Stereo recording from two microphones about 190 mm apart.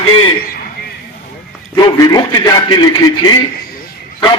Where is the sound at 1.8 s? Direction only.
20° left (ahead or behind).